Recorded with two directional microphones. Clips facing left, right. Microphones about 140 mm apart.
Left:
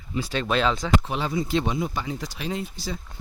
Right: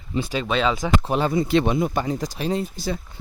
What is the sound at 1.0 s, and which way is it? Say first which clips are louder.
Speech: right 6 dB; 45° right (ahead or behind).